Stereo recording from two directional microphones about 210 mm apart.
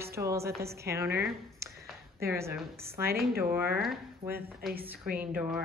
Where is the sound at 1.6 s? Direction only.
15° right (ahead or behind).